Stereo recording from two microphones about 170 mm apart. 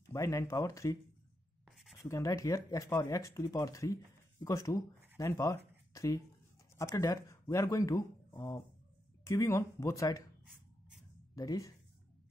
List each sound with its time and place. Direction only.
0.1 s speech: 20° left (ahead or behind)
2.0 s speech: 15° left (ahead or behind)
10.4 s a sound: 60° right (ahead or behind)
11.3 s speech: 20° left (ahead or behind)